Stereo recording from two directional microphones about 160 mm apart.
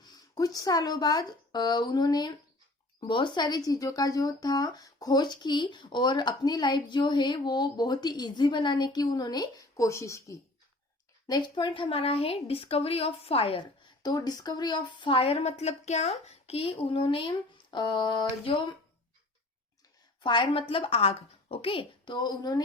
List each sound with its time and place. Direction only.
0.0 s speech: 25° left (ahead or behind)
20.2 s speech: 30° left (ahead or behind)